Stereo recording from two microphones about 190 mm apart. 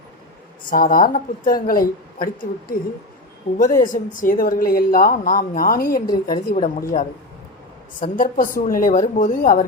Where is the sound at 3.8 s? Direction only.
45° left (ahead or behind).